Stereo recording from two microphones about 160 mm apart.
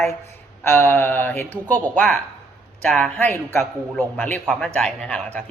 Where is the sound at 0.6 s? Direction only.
15° left (ahead or behind).